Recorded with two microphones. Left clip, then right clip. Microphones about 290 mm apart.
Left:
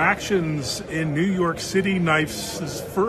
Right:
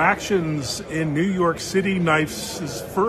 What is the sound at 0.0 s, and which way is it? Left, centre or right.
A man's voice, centre.